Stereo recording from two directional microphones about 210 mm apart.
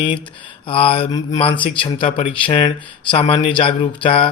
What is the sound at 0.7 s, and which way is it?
Speech, 25° left (ahead or behind).